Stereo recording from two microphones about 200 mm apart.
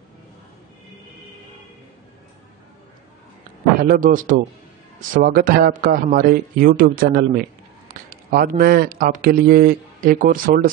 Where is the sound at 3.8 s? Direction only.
45° right (ahead or behind).